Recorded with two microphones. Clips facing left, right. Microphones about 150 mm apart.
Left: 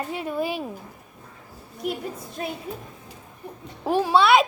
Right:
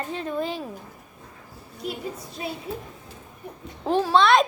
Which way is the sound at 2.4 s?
50° left (ahead or behind).